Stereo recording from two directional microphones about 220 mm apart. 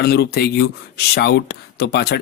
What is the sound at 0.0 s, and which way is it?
Speech, 45° left (ahead or behind).